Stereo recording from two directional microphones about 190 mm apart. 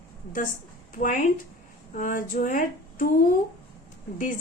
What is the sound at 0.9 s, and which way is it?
A woman's voice, 40° left (ahead or behind).